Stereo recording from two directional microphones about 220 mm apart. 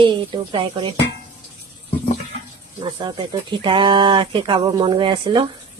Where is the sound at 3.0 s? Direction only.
20° right (ahead or behind).